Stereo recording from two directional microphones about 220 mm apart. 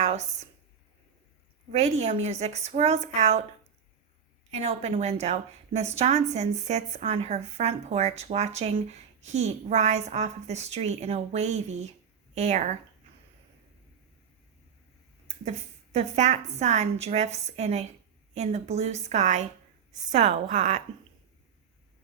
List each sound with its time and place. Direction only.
0.0 s a woman's voice: 30° right (ahead or behind)
1.7 s a woman's voice: 30° right (ahead or behind)
4.5 s a woman's voice: 30° right (ahead or behind)
15.3 s a woman's voice: 30° right (ahead or behind)